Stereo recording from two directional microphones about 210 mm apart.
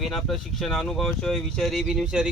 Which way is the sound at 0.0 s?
Centre (ahead or behind).